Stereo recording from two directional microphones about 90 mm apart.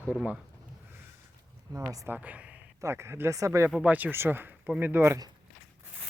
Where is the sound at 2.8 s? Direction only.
30° right (ahead or behind).